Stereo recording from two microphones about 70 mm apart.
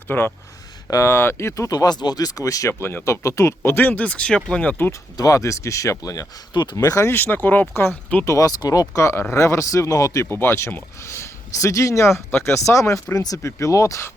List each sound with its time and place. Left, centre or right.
0.1 s speech: left
2.8 s speech: left; by 4.8 s centre
5.1 s speech: left
6.5 s speech: left
6.7 s speech: left
7.1 s speech: left
8.2 s speech: left
9.0 s speech: left
10.3 s speech: left